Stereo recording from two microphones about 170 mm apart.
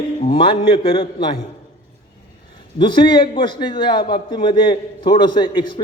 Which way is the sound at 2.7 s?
30° left (ahead or behind).